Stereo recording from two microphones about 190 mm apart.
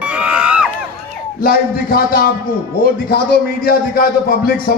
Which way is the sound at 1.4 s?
50° left (ahead or behind).